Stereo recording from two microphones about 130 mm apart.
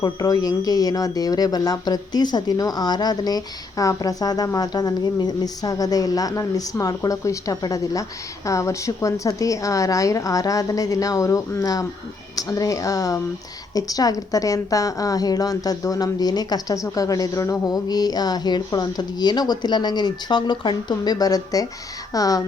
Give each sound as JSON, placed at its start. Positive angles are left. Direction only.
{"t": 0.0, "sound": "speech", "side_deg": 30}